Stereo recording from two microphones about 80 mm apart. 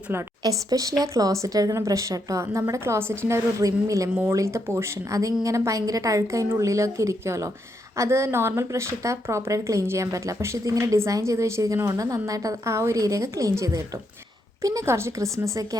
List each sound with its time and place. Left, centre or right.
0.4 s a woman's voice: right
3.6 s a woman's voice: right
14.8 s speech: right